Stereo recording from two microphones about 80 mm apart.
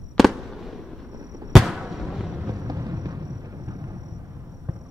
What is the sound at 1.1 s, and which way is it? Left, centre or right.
Fireworks, right.